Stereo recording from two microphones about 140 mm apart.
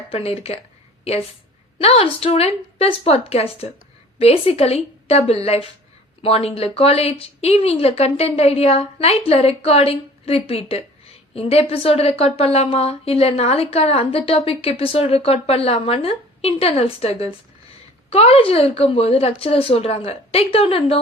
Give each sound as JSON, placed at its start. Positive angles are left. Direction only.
{"t": 0.1, "sound": "a woman's voice", "side_deg": 45}
{"t": 1.8, "sound": "a woman's voice", "side_deg": 45}